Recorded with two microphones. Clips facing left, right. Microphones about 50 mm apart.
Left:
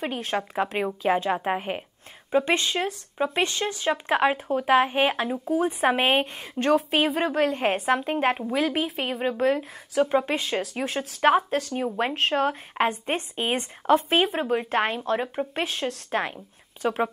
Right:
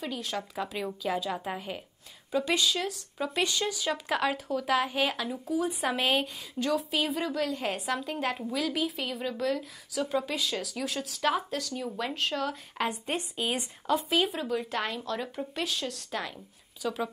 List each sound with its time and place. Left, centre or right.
0.0 s a woman's voice: left